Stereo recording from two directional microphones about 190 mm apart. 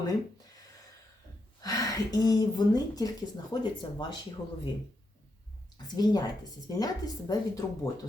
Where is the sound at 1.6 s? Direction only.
20° left (ahead or behind).